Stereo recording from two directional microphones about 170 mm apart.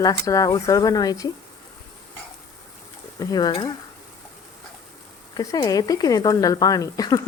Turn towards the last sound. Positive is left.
turn(degrees=20)  # may be behind; listen again after turning